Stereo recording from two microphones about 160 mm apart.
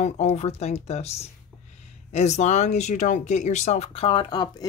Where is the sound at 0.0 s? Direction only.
45° left (ahead or behind).